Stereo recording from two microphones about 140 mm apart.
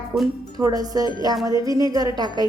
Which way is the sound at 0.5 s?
25° right (ahead or behind).